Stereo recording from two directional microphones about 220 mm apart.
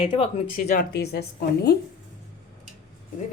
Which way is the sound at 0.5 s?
40° left (ahead or behind).